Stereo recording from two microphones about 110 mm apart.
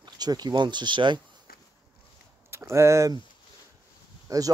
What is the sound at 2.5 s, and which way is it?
Speech, 25° right (ahead or behind).